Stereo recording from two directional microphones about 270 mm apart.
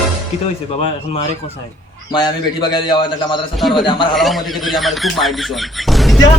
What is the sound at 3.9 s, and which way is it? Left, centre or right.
Speech, centre.